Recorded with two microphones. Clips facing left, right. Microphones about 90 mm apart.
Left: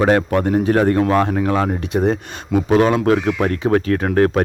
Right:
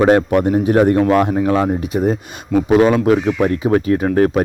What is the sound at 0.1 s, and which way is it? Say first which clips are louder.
Speech: right 3 dB; 20° right (ahead or behind).